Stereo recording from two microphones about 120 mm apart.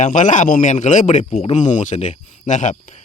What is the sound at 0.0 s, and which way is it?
Speech, 90° left.